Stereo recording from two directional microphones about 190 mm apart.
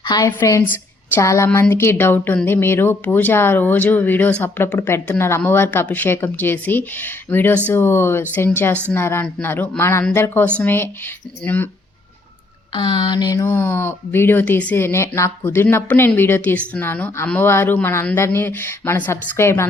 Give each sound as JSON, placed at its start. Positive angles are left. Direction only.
{"t": 0.0, "sound": "a woman's voice", "side_deg": 20}
{"t": 12.7, "sound": "speech", "side_deg": 25}